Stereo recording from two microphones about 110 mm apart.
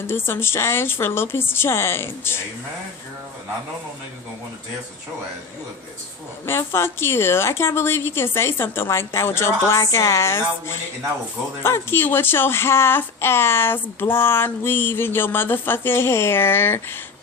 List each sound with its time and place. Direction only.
0.1 s speech: 20° left (ahead or behind)
6.4 s speech: 20° left (ahead or behind)